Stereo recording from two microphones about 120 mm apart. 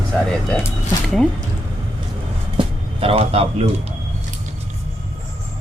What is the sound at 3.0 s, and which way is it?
Speech, 55° right (ahead or behind).